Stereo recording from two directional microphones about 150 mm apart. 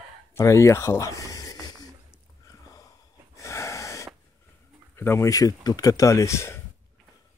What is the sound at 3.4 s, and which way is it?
Wheeze, 20° left (ahead or behind).